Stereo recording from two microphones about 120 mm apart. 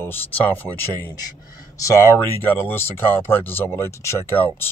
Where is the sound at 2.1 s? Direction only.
15° left (ahead or behind).